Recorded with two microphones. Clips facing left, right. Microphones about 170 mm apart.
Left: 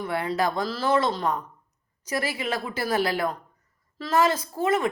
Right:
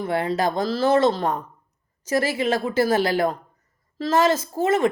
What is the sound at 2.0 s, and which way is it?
A woman's voice, 25° right (ahead or behind).